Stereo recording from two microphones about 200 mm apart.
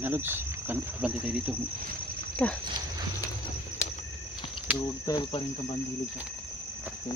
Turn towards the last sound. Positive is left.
turn(degrees=25)  # may be behind; listen again after turning